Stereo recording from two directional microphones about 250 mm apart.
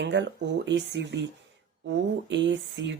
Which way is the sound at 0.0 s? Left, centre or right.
Right.